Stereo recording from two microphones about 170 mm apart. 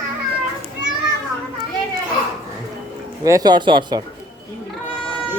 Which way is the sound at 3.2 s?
20° right (ahead or behind).